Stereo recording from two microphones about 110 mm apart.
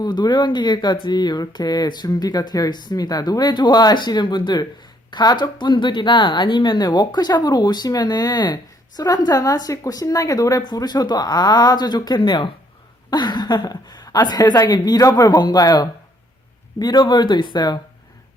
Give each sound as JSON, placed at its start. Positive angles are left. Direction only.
{"t": 0.0, "sound": "speech", "side_deg": 40}